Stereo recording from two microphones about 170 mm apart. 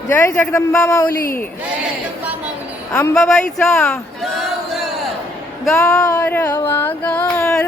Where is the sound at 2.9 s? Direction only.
15° left (ahead or behind).